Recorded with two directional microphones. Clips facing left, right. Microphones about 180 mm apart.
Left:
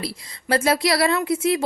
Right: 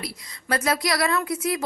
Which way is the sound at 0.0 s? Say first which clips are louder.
Left 5 dB; 30° left (ahead or behind).